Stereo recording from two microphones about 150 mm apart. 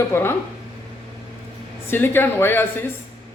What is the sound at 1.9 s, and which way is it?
Speech, 15° left (ahead or behind).